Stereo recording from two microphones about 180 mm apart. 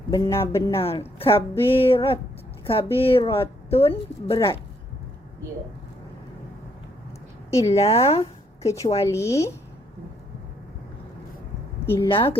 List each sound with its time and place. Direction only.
0.1 s speech: 15° left (ahead or behind)
0.9 s a woman's voice: 30° left (ahead or behind)
1.3 s speech: 15° left (ahead or behind)
1.8 s a woman's voice: 30° left (ahead or behind)
7.6 s a woman's voice: 35° left (ahead or behind)
8.6 s speech: 20° left (ahead or behind)
12.0 s a woman's voice: 30° left (ahead or behind)